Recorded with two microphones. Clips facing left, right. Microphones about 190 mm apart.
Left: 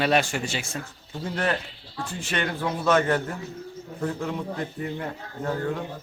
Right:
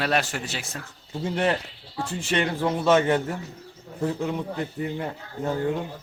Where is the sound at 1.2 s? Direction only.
20° right (ahead or behind).